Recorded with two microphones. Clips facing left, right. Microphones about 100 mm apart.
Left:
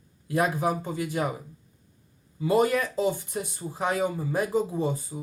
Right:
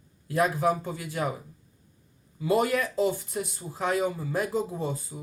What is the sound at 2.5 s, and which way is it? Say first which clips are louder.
A man's voice: left 2 dB; 20° left (ahead or behind).